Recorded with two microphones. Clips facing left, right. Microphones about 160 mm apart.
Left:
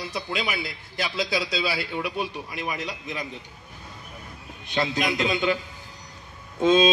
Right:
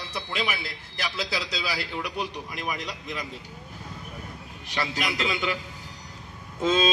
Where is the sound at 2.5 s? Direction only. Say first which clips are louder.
Left 2 dB; centre (ahead or behind).